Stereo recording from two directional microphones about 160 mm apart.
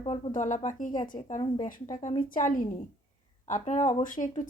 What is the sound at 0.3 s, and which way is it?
A woman's voice, 50° left (ahead or behind).